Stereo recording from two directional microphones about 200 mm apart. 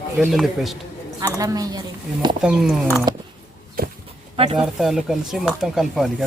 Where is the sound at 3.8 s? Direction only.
50° right (ahead or behind).